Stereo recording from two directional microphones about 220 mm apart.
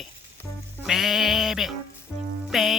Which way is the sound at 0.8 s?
Centre (ahead or behind).